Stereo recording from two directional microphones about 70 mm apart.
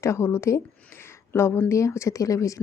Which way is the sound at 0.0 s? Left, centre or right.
Left.